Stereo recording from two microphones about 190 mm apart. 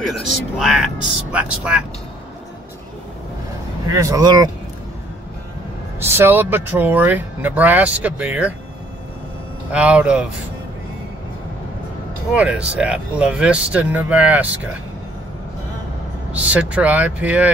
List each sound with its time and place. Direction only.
0.6 s speech: centre (ahead or behind)
3.9 s speech: 15° right (ahead or behind)
5.9 s speech: 10° right (ahead or behind)
9.7 s speech: 5° right (ahead or behind)
12.4 s speech: 5° right (ahead or behind)
16.3 s speech: 5° right (ahead or behind)